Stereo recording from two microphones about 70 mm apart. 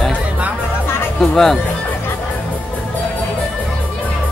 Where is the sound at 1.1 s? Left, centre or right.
Centre.